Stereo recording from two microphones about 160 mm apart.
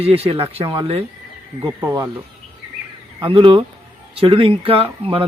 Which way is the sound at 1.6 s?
20° right (ahead or behind).